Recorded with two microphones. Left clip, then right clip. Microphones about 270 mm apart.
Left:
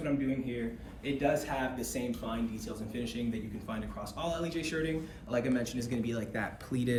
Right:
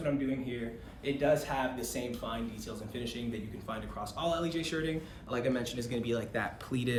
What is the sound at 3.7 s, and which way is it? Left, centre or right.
Speech, centre.